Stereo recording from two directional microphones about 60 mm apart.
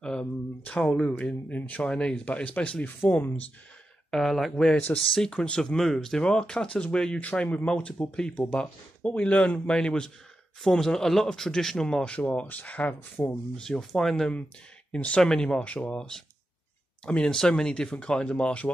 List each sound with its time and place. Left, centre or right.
0.0 s a sound: centre
0.7 s speech: centre
1.2 s speech: left
3.0 s speech: left
4.1 s speech: centre
4.7 s speech: centre
8.4 s speech: left
12.4 s speech: left
13.2 s speech: left
13.6 s speech: centre
14.9 s speech: centre
15.6 s speech: left
17.0 s speech: centre